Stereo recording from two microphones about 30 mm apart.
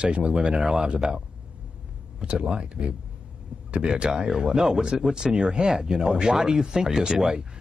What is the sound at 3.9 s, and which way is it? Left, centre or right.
Speech, right.